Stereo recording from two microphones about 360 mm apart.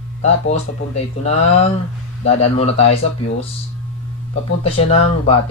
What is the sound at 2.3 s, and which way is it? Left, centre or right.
Speech, centre.